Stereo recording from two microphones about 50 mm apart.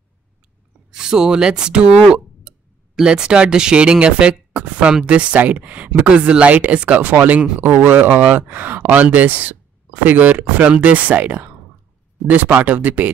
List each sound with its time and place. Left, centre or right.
0.9 s speech: centre; by 7.3 s right
7.3 s speech: right
7.6 s speech: right